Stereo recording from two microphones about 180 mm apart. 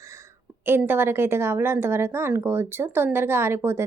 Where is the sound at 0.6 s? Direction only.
10° right (ahead or behind).